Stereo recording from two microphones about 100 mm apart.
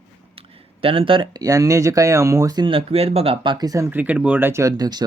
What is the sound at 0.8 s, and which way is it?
Speech, 65° right (ahead or behind).